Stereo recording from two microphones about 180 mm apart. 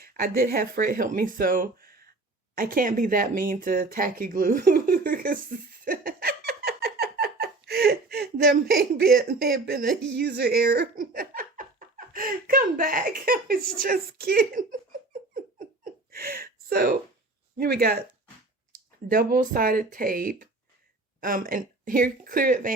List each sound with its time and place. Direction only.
0.0 s speech: 55° right (ahead or behind)
15.5 s hiccup: 50° right (ahead or behind)
17.6 s speech: 60° right (ahead or behind)
19.0 s speech: 55° right (ahead or behind)